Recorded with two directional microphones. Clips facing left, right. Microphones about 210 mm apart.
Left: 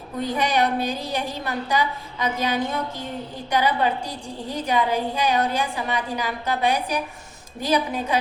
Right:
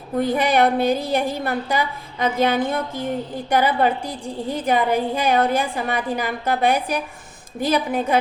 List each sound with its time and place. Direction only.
0.2 s a woman's voice: 55° right (ahead or behind)